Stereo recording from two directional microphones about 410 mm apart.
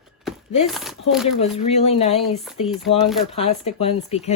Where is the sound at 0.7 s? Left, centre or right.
Centre.